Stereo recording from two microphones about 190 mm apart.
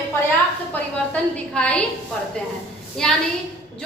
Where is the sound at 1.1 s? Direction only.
5° left (ahead or behind).